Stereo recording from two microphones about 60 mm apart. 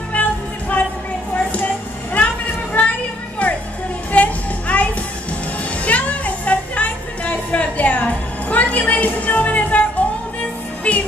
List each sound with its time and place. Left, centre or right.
0.1 s music: left
2.8 s a sound: left
3.4 s music: left
5.9 s music: left